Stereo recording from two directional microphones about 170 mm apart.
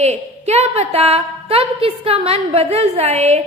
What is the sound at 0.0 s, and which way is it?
A woman's voice, 40° right (ahead or behind).